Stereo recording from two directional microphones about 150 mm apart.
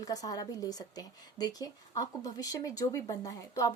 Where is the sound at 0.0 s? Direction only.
25° left (ahead or behind).